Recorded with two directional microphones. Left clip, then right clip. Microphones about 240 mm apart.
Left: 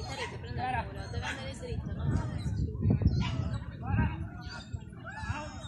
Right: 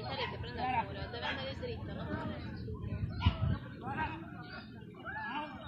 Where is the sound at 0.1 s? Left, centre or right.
Left.